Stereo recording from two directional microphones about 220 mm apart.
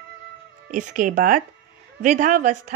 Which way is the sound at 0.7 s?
35° right (ahead or behind).